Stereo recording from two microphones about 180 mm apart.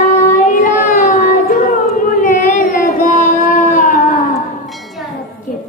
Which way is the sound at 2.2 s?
45° left (ahead or behind).